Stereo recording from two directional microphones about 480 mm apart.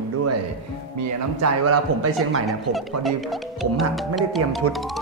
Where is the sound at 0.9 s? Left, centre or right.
Right.